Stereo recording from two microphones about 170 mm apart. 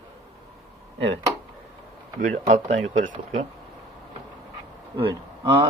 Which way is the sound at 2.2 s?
45° right (ahead or behind).